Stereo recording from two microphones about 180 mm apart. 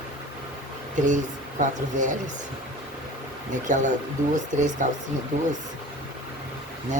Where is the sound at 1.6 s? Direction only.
45° right (ahead or behind).